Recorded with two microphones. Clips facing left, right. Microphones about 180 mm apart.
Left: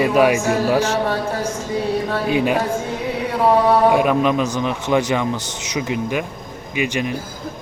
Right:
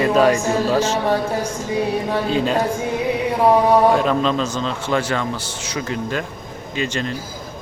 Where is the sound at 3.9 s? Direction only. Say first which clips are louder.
Left 2 dB; 15° left (ahead or behind).